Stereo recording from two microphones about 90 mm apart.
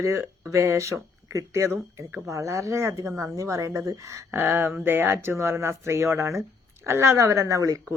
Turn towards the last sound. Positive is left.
turn(degrees=-40)  # may be behind; listen again after turning